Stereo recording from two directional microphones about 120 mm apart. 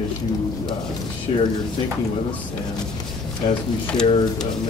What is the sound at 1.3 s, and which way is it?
Speech, 55° left (ahead or behind).